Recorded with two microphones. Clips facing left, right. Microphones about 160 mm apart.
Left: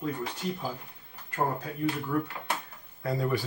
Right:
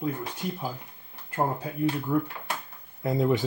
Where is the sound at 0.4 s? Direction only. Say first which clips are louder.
Right 1 dB; 10° right (ahead or behind).